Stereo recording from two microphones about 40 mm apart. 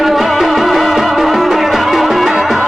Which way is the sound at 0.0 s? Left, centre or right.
Centre.